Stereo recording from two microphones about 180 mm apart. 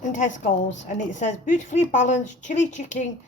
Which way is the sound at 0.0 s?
45° left (ahead or behind).